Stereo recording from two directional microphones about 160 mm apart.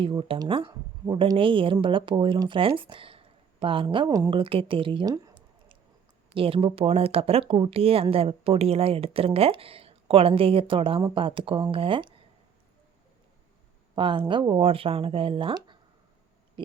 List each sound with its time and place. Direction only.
0.0 s speech: 30° right (ahead or behind)
6.3 s speech: 35° right (ahead or behind)
13.9 s speech: 30° right (ahead or behind)